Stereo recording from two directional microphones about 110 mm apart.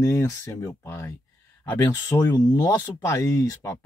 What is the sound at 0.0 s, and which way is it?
Speech, 25° left (ahead or behind).